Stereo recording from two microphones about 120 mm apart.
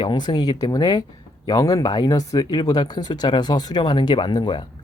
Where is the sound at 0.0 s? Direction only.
40° left (ahead or behind).